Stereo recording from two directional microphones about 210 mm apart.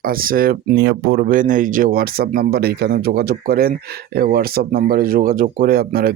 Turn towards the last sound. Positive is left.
turn(degrees=-45)  # may be behind; listen again after turning